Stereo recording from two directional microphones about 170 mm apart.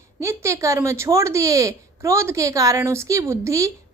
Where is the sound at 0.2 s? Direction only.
15° right (ahead or behind).